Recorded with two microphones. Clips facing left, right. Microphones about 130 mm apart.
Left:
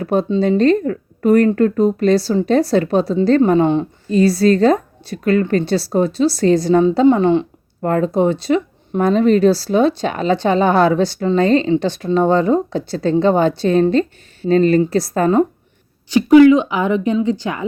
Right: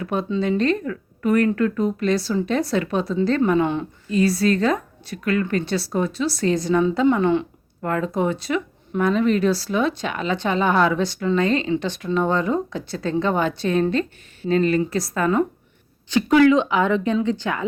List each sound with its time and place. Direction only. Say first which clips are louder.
0.0 s speech: left 7 dB; 35° left (ahead or behind)
16.0 s a woman's voice: left 7 dB; 10° left (ahead or behind)